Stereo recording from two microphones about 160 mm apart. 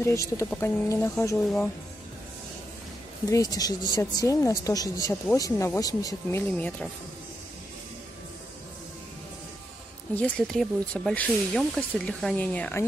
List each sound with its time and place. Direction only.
0.0 s speech: 20° left (ahead or behind)
3.3 s a woman's voice: 20° left (ahead or behind)
10.1 s speech: 5° left (ahead or behind)